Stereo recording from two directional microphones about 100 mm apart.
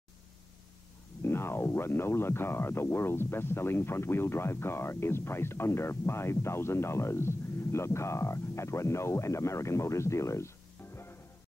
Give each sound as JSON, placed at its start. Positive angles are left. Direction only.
{"t": 1.2, "sound": "speech", "side_deg": 25}